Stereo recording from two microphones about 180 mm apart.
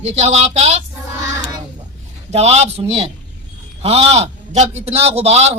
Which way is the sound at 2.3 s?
35° right (ahead or behind).